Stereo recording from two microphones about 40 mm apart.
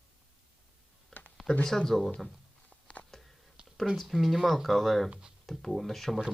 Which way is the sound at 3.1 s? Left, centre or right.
Centre.